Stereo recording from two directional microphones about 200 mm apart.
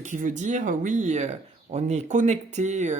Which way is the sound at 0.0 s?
40° right (ahead or behind).